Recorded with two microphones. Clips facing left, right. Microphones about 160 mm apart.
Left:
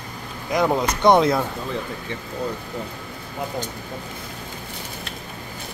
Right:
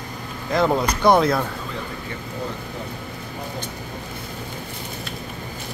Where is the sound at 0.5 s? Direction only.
15° left (ahead or behind).